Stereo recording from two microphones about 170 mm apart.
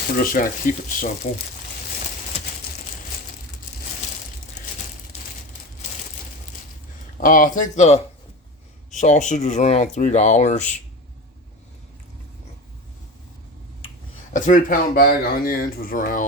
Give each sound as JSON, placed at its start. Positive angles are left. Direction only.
{"t": 0.2, "sound": "speech", "side_deg": 55}
{"t": 7.2, "sound": "speech", "side_deg": 50}
{"t": 14.3, "sound": "speech", "side_deg": 50}